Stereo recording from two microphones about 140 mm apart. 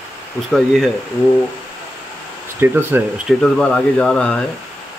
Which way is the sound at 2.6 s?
20° right (ahead or behind).